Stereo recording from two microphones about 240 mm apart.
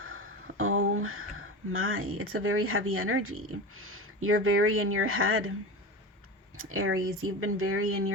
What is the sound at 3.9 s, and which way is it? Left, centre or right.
A woman's voice, right.